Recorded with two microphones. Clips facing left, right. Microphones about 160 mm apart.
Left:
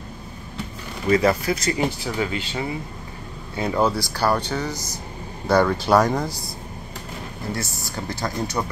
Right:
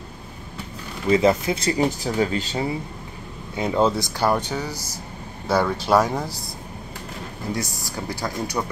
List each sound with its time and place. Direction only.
1.1 s speech: 20° right (ahead or behind); by 2.7 s 35° right (ahead or behind)
3.5 s speech: 20° right (ahead or behind)
4.5 s speech: 10° right (ahead or behind)
7.5 s speech: 15° right (ahead or behind)